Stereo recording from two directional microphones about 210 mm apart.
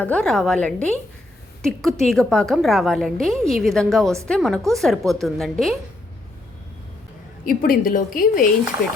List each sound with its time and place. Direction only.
0.0 s a woman's voice: 5° left (ahead or behind)
7.4 s a woman's voice: 45° left (ahead or behind)